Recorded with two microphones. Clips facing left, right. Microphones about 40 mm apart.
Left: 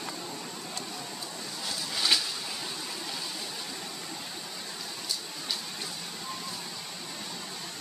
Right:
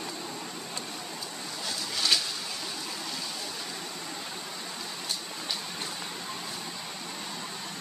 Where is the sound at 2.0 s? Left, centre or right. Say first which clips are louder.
Even; centre.